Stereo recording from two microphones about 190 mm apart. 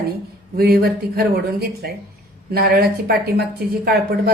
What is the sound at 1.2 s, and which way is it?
A woman's voice, 55° right (ahead or behind).